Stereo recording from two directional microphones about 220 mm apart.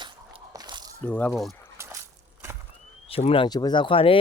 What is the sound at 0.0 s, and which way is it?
Biting, 20° right (ahead or behind).